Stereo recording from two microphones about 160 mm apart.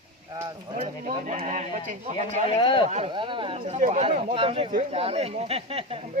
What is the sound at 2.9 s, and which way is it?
Speech, 45° right (ahead or behind).